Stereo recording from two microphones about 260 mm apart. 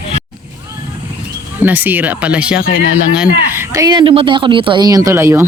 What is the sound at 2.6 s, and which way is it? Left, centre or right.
Speech, left.